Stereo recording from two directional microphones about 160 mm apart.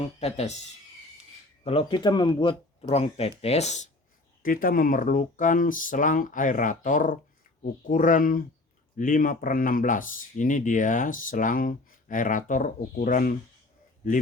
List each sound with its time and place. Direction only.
0.2 s speech: 40° left (ahead or behind)
1.6 s speech: 35° left (ahead or behind)
4.4 s speech: 60° left (ahead or behind)